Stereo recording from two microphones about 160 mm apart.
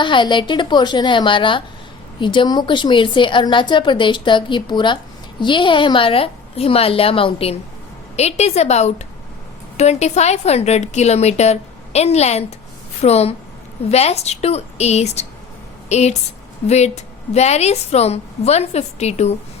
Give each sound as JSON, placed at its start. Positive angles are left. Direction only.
{"t": 0.0, "sound": "a woman's voice", "side_deg": 30}